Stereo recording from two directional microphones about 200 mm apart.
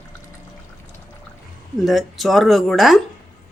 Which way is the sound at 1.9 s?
Centre (ahead or behind).